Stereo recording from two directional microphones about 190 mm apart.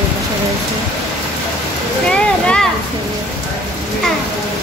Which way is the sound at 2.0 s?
5° left (ahead or behind).